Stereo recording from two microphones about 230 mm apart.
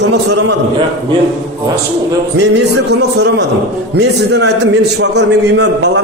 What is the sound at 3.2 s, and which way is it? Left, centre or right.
A man's voice, right.